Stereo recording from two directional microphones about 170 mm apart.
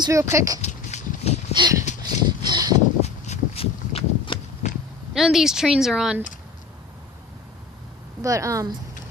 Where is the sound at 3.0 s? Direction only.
35° left (ahead or behind).